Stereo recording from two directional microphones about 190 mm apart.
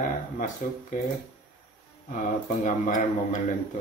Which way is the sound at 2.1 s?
40° left (ahead or behind).